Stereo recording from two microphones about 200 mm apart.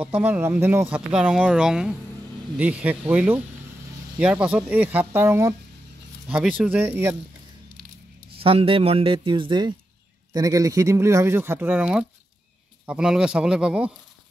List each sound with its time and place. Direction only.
0.0 s speech: 10° right (ahead or behind)
8.4 s speech: 25° right (ahead or behind); by 13.9 s 5° right (ahead or behind)